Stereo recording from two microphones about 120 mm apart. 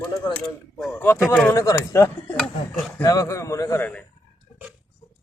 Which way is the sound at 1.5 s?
30° left (ahead or behind).